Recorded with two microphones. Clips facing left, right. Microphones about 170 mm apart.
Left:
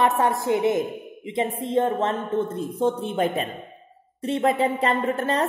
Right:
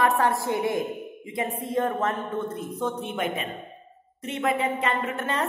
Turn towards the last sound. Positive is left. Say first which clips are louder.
# left 5 dB
turn(degrees=35)  # may be behind; listen again after turning